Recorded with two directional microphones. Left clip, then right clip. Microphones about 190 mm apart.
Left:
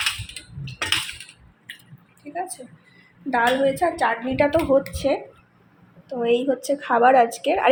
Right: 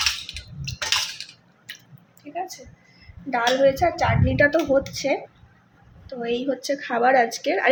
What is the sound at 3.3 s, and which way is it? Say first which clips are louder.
Speech: even; centre (ahead or behind).